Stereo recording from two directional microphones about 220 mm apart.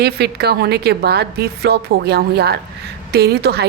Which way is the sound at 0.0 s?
45° right (ahead or behind).